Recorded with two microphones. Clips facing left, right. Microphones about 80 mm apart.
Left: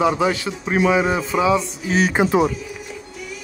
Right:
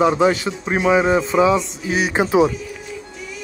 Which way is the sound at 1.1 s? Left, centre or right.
Centre.